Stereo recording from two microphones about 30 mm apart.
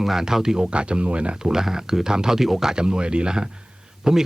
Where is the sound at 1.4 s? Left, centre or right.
Centre.